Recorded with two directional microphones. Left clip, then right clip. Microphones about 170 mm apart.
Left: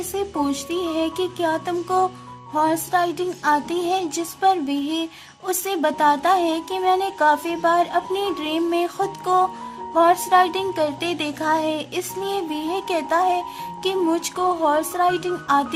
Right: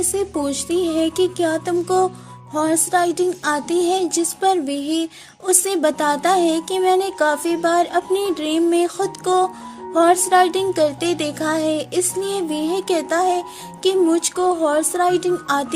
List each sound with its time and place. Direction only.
0.2 s speech: 30° right (ahead or behind)
2.5 s music: 30° right (ahead or behind)
5.5 s speech: 30° right (ahead or behind)
9.9 s music: 30° right (ahead or behind)
13.8 s speech: 25° right (ahead or behind)